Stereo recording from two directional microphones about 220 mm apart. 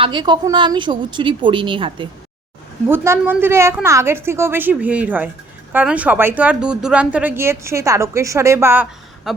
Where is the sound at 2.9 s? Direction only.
10° right (ahead or behind).